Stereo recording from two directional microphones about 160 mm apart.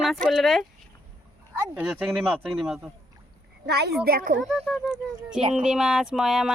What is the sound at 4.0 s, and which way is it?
Speech, 70° right (ahead or behind).